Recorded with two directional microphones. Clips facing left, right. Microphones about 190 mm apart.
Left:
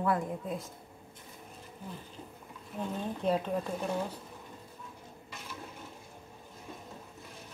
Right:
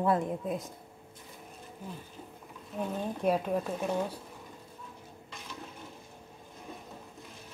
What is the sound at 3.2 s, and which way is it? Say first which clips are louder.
Speech: right 2 dB; 10° right (ahead or behind).